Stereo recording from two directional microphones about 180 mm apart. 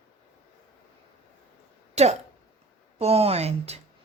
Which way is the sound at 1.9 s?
35° right (ahead or behind).